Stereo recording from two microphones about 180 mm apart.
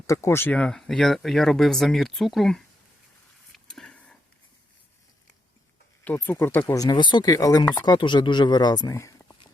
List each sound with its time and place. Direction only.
0.1 s speech: 15° left (ahead or behind)
3.5 s a sound: centre (ahead or behind)
6.1 s speech: 10° left (ahead or behind)